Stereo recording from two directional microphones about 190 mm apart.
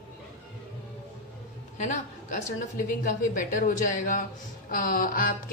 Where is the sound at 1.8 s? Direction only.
40° left (ahead or behind).